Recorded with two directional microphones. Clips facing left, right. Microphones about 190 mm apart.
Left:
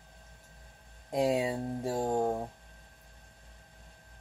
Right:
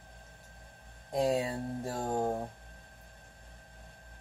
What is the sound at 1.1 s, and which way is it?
Speech, 15° left (ahead or behind).